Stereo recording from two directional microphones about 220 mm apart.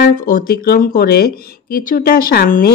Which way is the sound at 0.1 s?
40° left (ahead or behind).